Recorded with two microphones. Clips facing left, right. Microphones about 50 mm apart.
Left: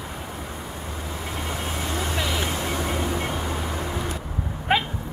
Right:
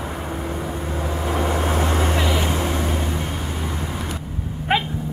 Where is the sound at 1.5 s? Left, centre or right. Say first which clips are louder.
Right 8 dB; right.